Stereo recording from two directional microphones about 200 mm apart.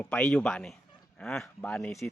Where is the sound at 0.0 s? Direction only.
5° left (ahead or behind).